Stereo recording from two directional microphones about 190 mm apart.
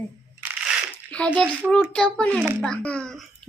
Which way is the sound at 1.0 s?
5° left (ahead or behind).